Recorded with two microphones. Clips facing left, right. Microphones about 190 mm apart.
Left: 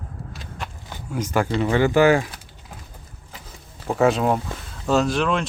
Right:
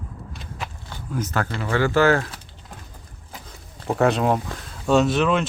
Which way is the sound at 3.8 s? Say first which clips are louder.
Left 1 dB; centre (ahead or behind).